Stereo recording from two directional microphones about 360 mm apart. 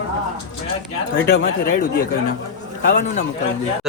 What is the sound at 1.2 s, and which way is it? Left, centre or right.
Speech, left.